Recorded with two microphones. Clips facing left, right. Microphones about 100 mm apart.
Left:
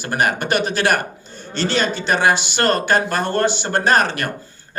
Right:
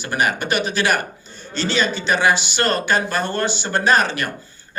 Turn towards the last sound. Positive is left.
turn(degrees=50)  # may be behind; listen again after turning